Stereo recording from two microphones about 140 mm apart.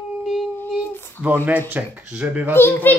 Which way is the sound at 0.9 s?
15° left (ahead or behind).